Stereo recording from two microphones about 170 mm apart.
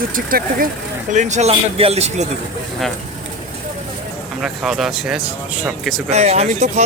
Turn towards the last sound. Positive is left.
turn(degrees=-40)  # may be behind; listen again after turning